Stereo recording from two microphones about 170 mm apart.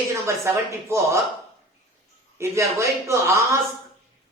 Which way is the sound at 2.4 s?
15° right (ahead or behind).